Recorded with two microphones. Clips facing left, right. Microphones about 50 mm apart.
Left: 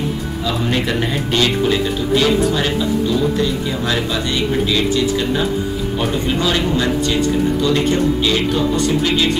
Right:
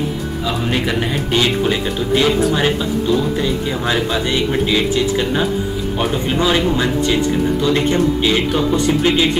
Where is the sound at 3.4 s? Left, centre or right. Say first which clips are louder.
Even; centre.